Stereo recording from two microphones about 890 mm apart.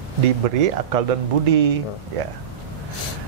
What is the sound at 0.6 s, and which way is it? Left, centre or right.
Speech, right.